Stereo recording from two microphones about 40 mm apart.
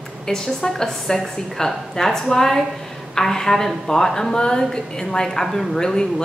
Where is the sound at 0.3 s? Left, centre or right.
Centre.